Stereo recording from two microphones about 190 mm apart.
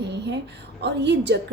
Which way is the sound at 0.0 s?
65° right (ahead or behind).